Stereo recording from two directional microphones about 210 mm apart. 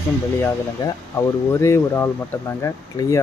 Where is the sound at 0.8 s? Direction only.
20° left (ahead or behind).